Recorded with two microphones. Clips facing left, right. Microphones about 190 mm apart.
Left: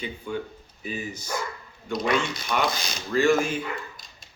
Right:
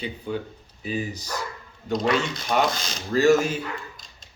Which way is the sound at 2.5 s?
45° right (ahead or behind).